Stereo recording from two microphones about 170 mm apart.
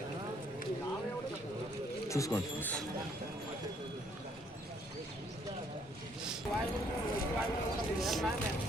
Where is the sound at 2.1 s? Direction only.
20° left (ahead or behind).